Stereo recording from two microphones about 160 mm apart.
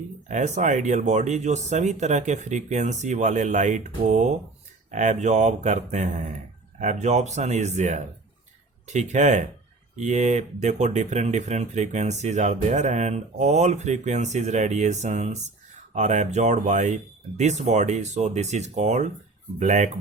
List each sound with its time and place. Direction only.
0.3 s speech: 45° right (ahead or behind)